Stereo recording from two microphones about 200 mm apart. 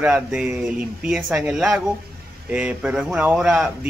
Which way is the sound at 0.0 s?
5° right (ahead or behind).